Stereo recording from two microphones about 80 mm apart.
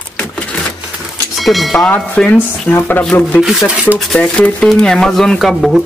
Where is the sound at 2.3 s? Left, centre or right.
Left.